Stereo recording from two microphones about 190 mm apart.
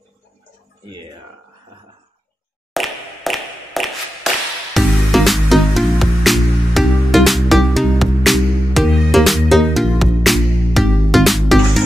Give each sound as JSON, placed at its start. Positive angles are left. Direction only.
{"t": 0.8, "sound": "speech", "side_deg": -20}
{"t": 2.7, "sound": "a sound", "side_deg": 0}
{"t": 4.7, "sound": "music", "side_deg": 0}